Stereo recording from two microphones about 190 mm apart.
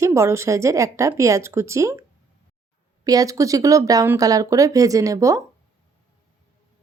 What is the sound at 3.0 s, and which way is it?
A woman's voice, 20° right (ahead or behind).